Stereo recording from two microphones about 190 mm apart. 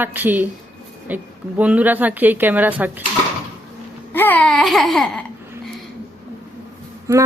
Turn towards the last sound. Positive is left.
turn(degrees=-15)  # may be behind; listen again after turning